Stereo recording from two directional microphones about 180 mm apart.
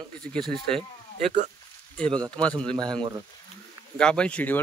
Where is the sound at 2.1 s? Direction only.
25° right (ahead or behind).